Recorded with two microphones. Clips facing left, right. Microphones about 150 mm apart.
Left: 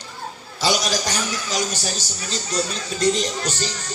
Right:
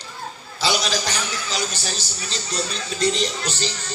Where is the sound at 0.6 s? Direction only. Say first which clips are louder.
Left 1 dB; 45° left (ahead or behind).